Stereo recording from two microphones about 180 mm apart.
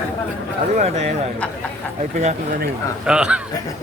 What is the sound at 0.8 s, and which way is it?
Speech, 35° right (ahead or behind).